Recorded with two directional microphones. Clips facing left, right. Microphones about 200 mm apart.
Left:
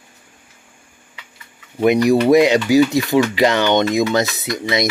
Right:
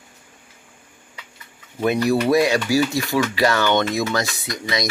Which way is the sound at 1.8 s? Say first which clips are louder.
Left 5 dB; 15° left (ahead or behind).